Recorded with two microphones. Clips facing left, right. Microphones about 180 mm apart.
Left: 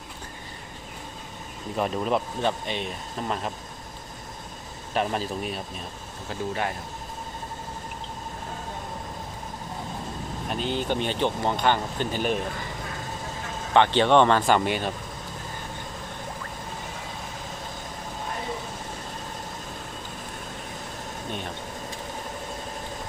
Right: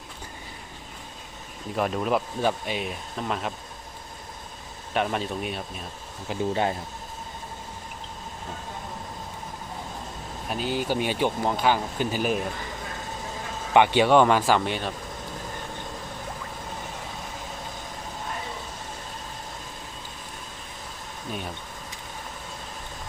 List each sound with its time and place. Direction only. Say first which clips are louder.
1.7 s speech: even; centre (ahead or behind)
4.9 s speech: even; centre (ahead or behind)
6.2 s speech: right 4 dB; 20° right (ahead or behind)
10.5 s speech: right 1 dB; 5° right (ahead or behind)
13.7 s speech: right 1 dB; 10° right (ahead or behind)